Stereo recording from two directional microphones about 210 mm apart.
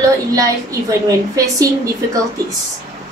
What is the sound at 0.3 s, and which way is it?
A woman's voice, 15° right (ahead or behind).